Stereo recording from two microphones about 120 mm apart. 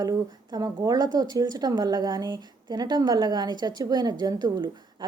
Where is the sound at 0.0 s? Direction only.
30° right (ahead or behind).